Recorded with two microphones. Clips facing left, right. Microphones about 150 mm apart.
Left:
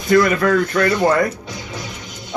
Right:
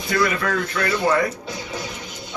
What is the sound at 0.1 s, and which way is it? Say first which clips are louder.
Speech: left 8 dB; 45° left (ahead or behind).